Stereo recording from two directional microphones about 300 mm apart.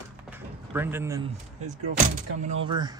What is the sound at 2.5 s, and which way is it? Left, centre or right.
Speech, centre.